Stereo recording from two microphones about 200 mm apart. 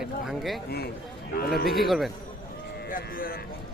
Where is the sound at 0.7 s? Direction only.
55° left (ahead or behind).